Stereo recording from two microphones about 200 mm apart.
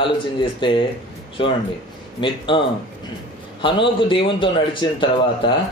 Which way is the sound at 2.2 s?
25° left (ahead or behind).